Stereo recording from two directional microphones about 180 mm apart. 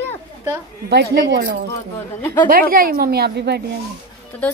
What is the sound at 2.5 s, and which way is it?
A woman's voice, 50° right (ahead or behind).